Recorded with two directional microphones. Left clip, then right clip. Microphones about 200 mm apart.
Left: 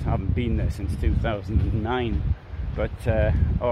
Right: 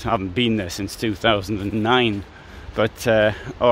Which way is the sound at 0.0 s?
50° right (ahead or behind).